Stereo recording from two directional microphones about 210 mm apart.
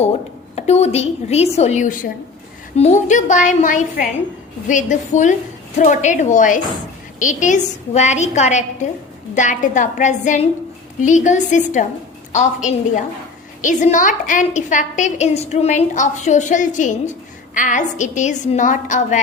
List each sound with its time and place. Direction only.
0.5 s a woman's voice: 30° left (ahead or behind)